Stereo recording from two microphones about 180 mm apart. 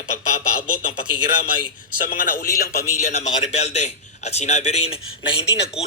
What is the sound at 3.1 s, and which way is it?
A man's voice, 40° left (ahead or behind).